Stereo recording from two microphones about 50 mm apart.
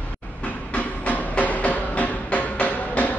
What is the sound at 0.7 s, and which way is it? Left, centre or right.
Music, left.